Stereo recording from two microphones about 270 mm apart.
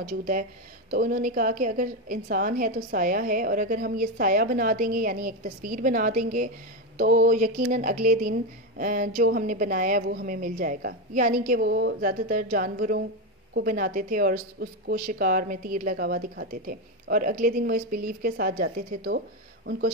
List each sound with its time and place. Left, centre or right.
0.0 s a woman's voice: right